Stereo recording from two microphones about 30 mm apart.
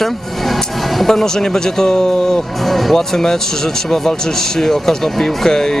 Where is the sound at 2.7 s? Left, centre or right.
Centre.